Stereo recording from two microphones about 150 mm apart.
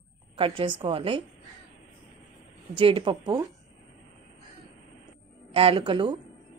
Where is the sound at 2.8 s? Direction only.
35° right (ahead or behind).